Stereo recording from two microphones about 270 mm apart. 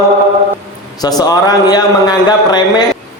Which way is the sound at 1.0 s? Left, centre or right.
Centre.